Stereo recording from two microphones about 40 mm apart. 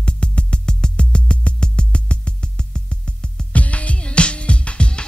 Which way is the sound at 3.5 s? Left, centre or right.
Left.